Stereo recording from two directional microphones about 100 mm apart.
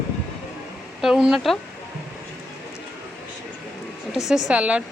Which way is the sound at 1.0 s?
5° right (ahead or behind).